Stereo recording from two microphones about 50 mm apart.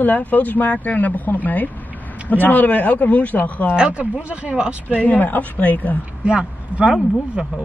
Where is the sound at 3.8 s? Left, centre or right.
Right.